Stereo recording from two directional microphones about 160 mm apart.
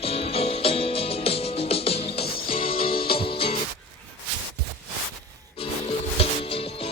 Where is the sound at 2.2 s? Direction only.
70° left (ahead or behind).